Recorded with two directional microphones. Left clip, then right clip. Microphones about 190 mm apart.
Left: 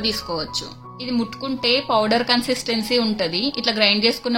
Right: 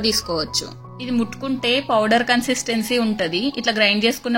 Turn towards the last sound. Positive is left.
turn(degrees=-20)  # may be behind; listen again after turning